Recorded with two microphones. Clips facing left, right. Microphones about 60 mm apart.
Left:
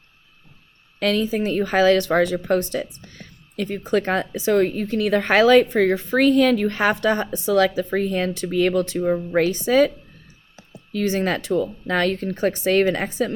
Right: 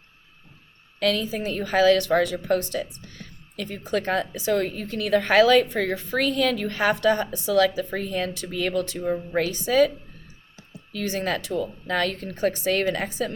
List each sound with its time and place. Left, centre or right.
0.9 s speech: left
10.9 s speech: left